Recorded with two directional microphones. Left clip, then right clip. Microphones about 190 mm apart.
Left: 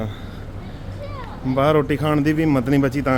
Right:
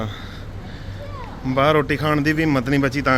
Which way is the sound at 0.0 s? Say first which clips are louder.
Right 1 dB; 10° left (ahead or behind).